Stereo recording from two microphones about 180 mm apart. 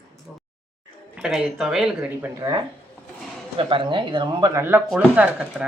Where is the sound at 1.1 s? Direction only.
5° right (ahead or behind).